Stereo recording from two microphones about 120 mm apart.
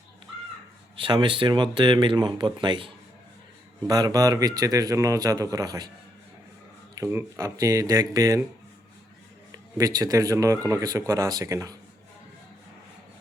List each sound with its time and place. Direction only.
0.9 s speech: 45° right (ahead or behind)
3.8 s speech: 30° right (ahead or behind)
6.9 s speech: 20° right (ahead or behind)
9.7 s speech: 30° right (ahead or behind)